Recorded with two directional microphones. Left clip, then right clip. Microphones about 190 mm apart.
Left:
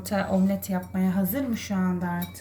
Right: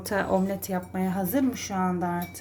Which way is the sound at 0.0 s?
35° right (ahead or behind).